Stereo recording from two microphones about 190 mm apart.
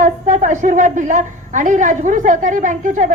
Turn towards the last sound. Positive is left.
turn(degrees=-40)  # may be behind; listen again after turning